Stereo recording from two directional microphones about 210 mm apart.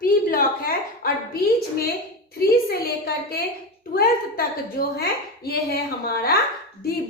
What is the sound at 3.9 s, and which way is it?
A woman's voice, 45° left (ahead or behind).